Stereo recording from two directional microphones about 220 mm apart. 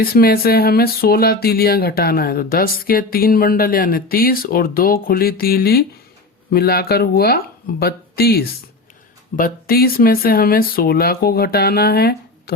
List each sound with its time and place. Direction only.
0.0 s speech: 45° left (ahead or behind)